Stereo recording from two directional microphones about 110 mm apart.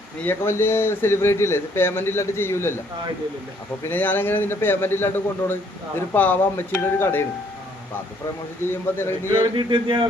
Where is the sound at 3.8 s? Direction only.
15° left (ahead or behind).